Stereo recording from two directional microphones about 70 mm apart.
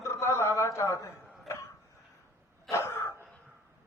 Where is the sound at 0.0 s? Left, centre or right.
Left.